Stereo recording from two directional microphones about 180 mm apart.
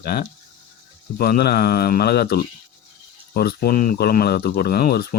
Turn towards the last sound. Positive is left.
turn(degrees=55)  # may be behind; listen again after turning